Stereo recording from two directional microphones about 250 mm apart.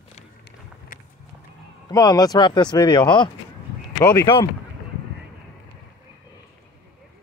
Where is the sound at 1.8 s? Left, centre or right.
Centre.